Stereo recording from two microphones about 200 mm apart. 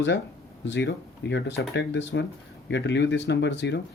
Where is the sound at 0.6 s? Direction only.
60° left (ahead or behind).